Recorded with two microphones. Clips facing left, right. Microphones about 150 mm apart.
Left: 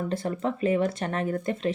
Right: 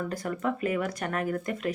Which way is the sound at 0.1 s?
25° left (ahead or behind).